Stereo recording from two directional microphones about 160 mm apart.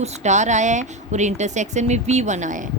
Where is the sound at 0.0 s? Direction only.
45° right (ahead or behind).